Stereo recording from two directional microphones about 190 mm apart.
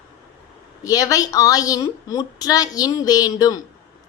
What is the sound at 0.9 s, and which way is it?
A woman's voice, 20° left (ahead or behind).